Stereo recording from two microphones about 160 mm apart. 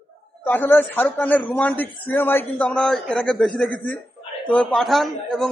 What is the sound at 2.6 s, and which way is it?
Speech, 5° left (ahead or behind).